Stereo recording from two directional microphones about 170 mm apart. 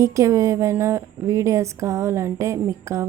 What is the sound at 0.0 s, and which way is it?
A woman's voice, 15° right (ahead or behind).